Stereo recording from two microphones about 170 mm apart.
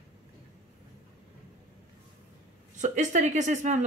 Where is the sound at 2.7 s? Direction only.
45° right (ahead or behind).